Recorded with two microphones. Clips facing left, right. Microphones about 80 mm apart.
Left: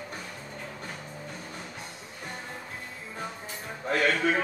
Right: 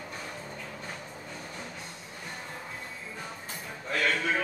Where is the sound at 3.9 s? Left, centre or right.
Left.